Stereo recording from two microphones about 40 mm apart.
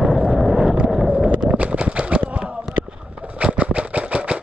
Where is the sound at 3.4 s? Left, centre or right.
Right.